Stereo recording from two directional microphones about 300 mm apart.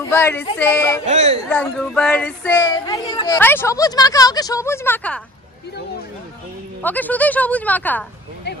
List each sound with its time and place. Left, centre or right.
0.1 s speech: centre
1.0 s speech: right
1.5 s speech: centre
6.8 s speech: centre